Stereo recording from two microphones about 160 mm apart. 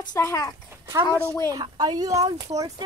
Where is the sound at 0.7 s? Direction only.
20° right (ahead or behind).